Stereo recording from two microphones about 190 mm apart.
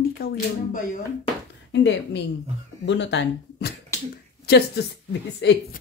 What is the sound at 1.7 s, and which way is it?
Speech, 70° left (ahead or behind).